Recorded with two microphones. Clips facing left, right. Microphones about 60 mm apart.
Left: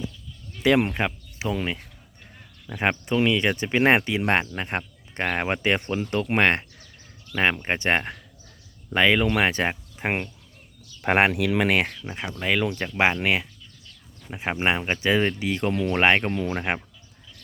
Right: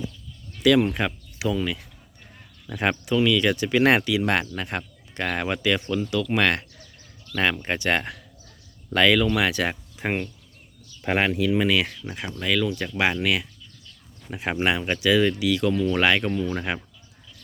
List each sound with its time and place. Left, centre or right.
0.9 s a sound: left
1.5 s speech: left
2.7 s speech: centre
3.1 s speech: left
11.0 s speech: left
11.3 s speech: left
12.0 s speech: centre
14.6 s speech: left